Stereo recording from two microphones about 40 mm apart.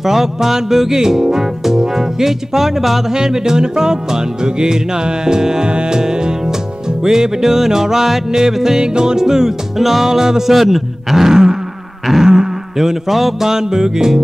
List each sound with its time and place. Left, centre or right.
0.0 s music: centre